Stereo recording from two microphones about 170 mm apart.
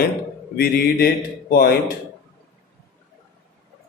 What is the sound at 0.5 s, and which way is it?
Speech, 70° left (ahead or behind).